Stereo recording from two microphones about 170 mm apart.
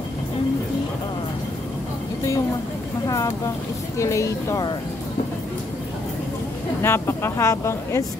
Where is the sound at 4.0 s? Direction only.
15° left (ahead or behind).